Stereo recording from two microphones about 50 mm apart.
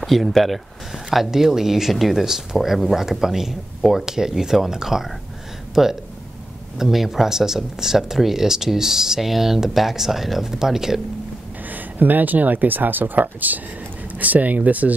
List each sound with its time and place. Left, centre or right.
0.0 s speech: centre
11.7 s speech: right